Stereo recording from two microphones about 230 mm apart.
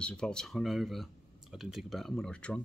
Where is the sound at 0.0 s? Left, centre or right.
Centre.